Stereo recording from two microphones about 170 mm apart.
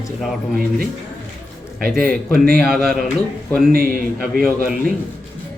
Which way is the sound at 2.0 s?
60° right (ahead or behind).